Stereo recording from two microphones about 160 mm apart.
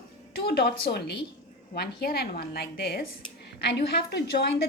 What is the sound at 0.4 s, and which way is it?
A woman's voice, 85° left.